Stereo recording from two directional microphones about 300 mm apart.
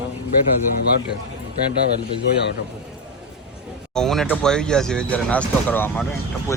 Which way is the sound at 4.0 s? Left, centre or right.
Centre.